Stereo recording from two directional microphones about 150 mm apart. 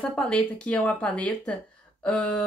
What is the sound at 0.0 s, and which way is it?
A woman's voice, 5° left (ahead or behind).